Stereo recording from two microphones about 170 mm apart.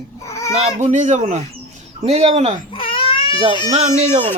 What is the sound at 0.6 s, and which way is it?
Speech, 40° right (ahead or behind).